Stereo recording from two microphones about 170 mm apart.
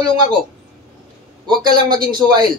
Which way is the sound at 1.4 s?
25° right (ahead or behind).